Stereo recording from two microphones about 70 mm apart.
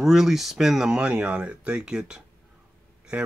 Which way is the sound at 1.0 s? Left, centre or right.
Centre.